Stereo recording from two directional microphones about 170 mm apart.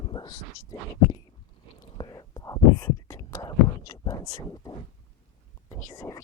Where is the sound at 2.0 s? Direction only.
20° left (ahead or behind).